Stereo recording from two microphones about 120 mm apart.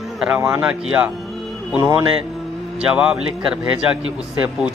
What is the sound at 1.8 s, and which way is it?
Speech, 25° right (ahead or behind).